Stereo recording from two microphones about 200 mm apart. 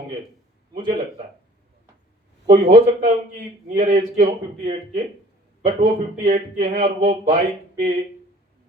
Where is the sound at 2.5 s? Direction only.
45° right (ahead or behind).